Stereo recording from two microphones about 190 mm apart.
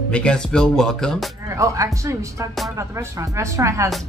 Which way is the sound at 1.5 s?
15° right (ahead or behind).